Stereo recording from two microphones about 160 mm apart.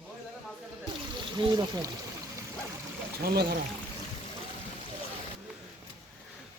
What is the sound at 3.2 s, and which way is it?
Speech, 90° right.